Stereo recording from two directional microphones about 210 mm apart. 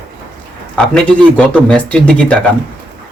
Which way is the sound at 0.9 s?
5° left (ahead or behind).